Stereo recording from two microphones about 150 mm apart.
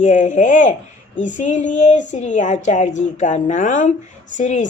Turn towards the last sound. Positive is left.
turn(degrees=55)  # may be behind; listen again after turning